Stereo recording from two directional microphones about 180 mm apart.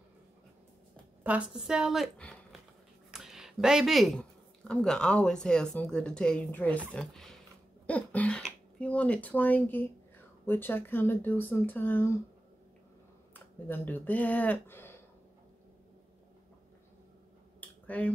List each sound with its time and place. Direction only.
1.2 s a woman's voice: 5° right (ahead or behind); by 12.1 s 10° left (ahead or behind)
13.3 s speech: 10° left (ahead or behind)
17.6 s finger snapping: 10° left (ahead or behind)